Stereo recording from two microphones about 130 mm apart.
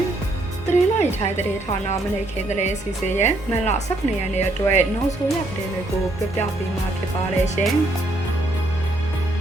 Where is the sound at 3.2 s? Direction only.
60° left (ahead or behind).